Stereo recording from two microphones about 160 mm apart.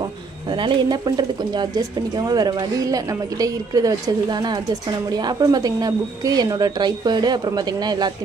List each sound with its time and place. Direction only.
0.0 s speech: 30° right (ahead or behind)